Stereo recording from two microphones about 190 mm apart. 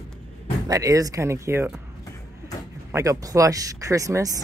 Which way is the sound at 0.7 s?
20° right (ahead or behind).